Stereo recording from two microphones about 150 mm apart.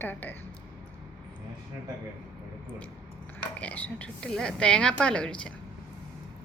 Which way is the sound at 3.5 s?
10° left (ahead or behind).